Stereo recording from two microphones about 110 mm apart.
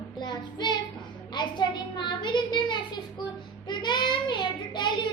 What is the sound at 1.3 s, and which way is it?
A child's voice, 45° left (ahead or behind).